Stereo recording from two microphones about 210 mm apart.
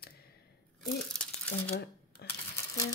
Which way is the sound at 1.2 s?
5° left (ahead or behind).